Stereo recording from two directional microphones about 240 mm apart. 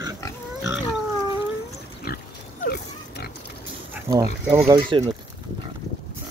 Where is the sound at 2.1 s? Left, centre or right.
Left.